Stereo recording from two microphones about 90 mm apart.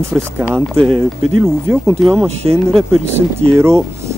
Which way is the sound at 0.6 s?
5° left (ahead or behind).